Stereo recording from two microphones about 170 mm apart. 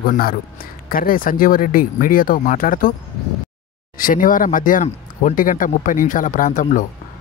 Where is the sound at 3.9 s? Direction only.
55° left (ahead or behind).